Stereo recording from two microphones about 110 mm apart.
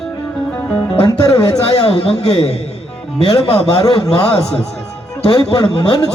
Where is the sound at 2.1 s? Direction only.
75° left (ahead or behind).